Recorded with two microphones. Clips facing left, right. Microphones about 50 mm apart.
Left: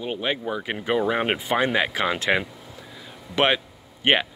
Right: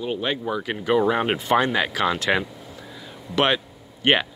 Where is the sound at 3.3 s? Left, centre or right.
Centre.